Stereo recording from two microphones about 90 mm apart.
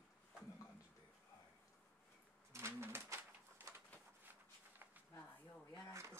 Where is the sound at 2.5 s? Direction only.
30° right (ahead or behind).